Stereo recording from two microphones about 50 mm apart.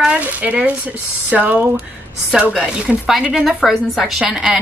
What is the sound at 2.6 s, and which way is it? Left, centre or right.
Speech, centre.